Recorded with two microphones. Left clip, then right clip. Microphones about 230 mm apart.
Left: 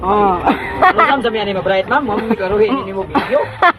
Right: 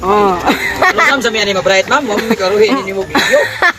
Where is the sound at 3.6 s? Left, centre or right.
Right.